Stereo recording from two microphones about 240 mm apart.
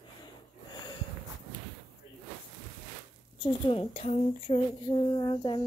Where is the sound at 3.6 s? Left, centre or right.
Left.